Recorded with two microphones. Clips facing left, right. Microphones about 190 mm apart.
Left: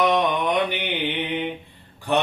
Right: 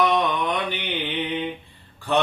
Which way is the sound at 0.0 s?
15° left (ahead or behind).